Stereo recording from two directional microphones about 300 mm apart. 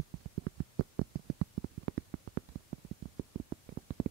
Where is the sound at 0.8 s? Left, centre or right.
Right.